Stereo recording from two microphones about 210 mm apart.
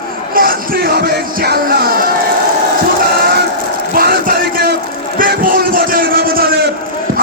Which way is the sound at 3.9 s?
45° right (ahead or behind).